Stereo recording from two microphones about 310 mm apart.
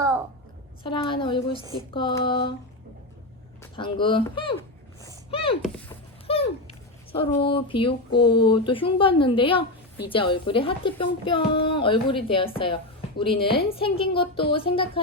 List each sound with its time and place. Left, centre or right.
0.9 s a woman's voice: centre
3.6 s a woman's voice: centre
5.0 s a sound: centre
6.2 s a woman's voice: centre